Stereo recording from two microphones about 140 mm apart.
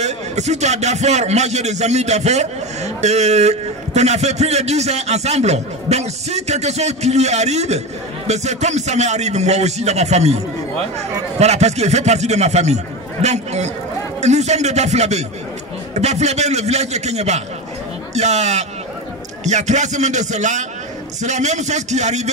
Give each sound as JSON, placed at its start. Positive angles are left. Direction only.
{"t": 0.0, "sound": "a man's voice", "side_deg": -55}